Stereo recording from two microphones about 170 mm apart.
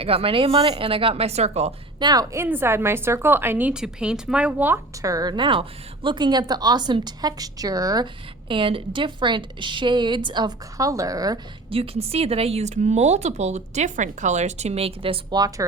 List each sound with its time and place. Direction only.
0.0 s speech: 35° right (ahead or behind)
2.0 s a woman's voice: 25° right (ahead or behind)
11.7 s speech: 35° right (ahead or behind)